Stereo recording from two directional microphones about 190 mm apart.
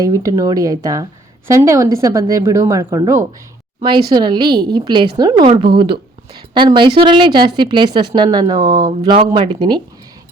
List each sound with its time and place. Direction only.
0.0 s a woman's voice: 15° right (ahead or behind)